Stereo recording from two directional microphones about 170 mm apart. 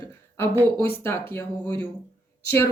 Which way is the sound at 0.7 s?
15° left (ahead or behind).